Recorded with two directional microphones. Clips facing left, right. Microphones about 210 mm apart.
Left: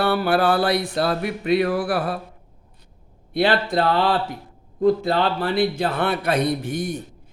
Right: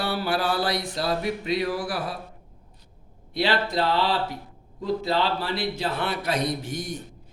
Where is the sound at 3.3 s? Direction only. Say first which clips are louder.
Left 5 dB; 55° left (ahead or behind).